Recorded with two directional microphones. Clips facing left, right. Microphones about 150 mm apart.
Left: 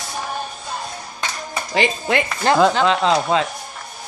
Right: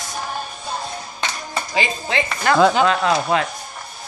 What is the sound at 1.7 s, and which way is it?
Speech, 55° left (ahead or behind).